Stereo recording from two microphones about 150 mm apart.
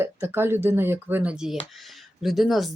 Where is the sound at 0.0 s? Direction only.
15° right (ahead or behind).